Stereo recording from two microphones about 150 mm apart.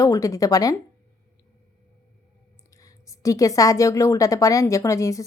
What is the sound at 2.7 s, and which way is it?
A woman's voice, 20° left (ahead or behind).